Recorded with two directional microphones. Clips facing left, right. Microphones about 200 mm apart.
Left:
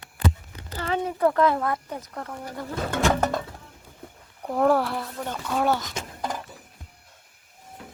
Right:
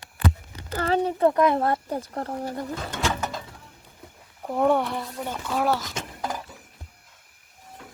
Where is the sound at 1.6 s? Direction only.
35° right (ahead or behind).